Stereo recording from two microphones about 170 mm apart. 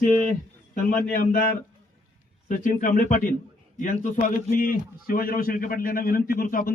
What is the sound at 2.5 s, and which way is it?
A man's voice, 50° left (ahead or behind).